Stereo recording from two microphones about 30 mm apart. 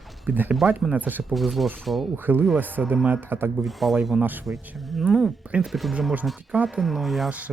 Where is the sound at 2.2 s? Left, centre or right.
Right.